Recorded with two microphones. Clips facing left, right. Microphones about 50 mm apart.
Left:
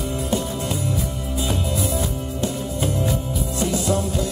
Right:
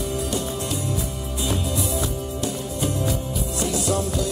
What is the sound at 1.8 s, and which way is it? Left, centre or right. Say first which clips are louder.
Music: left 1 dB; left.